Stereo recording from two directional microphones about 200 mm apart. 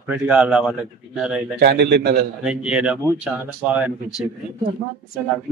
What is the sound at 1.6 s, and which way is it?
Speech, 55° right (ahead or behind).